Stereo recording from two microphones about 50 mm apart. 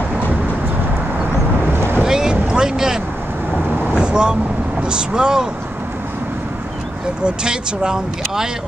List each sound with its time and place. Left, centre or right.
1.7 s boat: right
2.0 s boat: centre
2.5 s speech: centre
3.9 s vehicle: centre
4.8 s speech: centre
7.2 s speech: centre